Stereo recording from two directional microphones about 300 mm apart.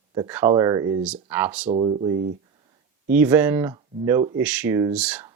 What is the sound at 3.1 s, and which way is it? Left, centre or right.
Speech, centre.